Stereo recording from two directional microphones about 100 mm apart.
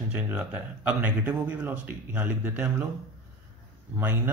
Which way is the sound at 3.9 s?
20° right (ahead or behind).